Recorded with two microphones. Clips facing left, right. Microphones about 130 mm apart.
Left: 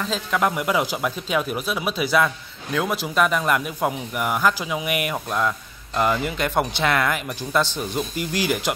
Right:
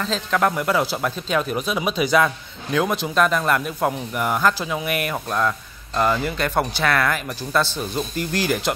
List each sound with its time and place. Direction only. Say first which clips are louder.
0.0 s speech: right 2 dB; 10° left (ahead or behind)